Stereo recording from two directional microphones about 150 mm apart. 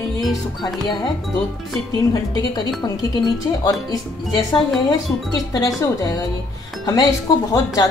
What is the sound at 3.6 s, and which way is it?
Speech, 25° left (ahead or behind).